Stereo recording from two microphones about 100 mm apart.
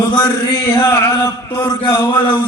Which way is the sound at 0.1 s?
45° left (ahead or behind).